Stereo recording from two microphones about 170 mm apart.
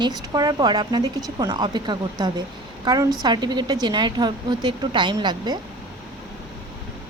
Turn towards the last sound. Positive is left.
turn(degrees=-25)  # may be behind; listen again after turning